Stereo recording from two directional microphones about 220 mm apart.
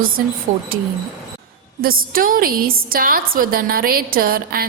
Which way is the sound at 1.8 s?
40° right (ahead or behind).